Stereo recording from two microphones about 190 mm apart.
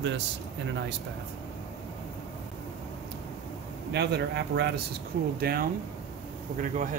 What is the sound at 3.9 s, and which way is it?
Speech, 60° right (ahead or behind).